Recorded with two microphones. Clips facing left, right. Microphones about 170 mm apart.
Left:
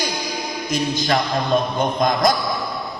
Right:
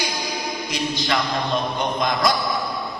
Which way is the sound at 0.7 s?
45° left (ahead or behind).